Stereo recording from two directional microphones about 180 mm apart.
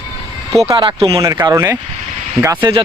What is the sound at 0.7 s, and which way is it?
Speech, 25° right (ahead or behind).